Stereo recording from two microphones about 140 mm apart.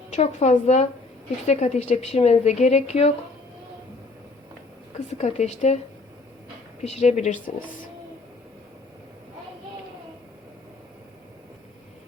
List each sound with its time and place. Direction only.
0.1 s a woman's voice: 55° left (ahead or behind)
4.9 s a woman's voice: 55° left (ahead or behind)
6.8 s a woman's voice: 55° left (ahead or behind)